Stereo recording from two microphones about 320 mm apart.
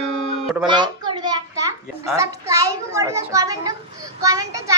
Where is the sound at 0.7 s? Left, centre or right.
Centre.